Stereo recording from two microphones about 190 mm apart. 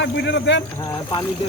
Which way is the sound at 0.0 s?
65° left (ahead or behind).